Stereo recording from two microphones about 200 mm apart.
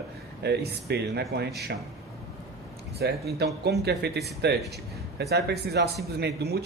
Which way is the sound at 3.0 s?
55° right (ahead or behind).